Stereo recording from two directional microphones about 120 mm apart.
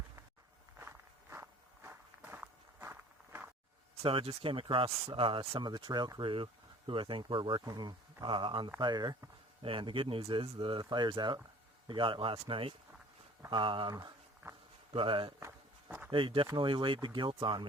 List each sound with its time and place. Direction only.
0.8 s walk: 20° right (ahead or behind)
4.0 s speech: 50° right (ahead or behind)
14.4 s a sound: 20° right (ahead or behind)
14.9 s speech: 45° right (ahead or behind)
15.4 s walk: 20° right (ahead or behind)
16.1 s speech: 45° right (ahead or behind)